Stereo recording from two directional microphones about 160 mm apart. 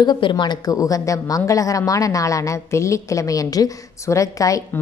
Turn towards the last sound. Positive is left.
turn(degrees=20)  # may be behind; listen again after turning